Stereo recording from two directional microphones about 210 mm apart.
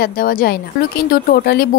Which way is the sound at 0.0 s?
45° left (ahead or behind).